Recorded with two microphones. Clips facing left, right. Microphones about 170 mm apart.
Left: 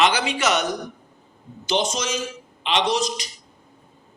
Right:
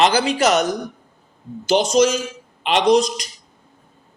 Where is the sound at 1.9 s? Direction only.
45° right (ahead or behind).